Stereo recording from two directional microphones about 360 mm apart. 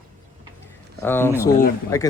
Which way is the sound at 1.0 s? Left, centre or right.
Centre.